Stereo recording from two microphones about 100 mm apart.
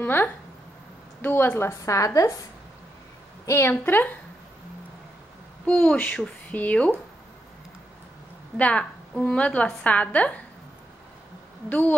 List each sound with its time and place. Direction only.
0.0 s a woman's voice: 20° left (ahead or behind)
3.4 s a woman's voice: 25° left (ahead or behind)
5.7 s a woman's voice: 10° left (ahead or behind)
8.5 s a woman's voice: 10° left (ahead or behind)